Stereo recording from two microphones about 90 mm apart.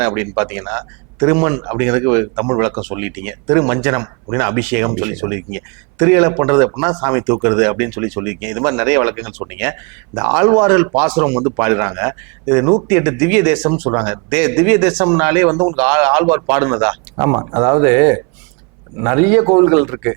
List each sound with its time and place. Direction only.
0.0 s speech: 15° right (ahead or behind)
17.2 s speech: 30° right (ahead or behind)